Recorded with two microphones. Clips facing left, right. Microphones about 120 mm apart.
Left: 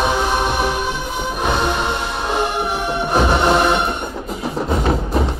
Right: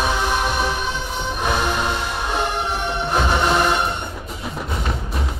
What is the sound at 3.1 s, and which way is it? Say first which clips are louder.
Music: left 4 dB; 20° left (ahead or behind).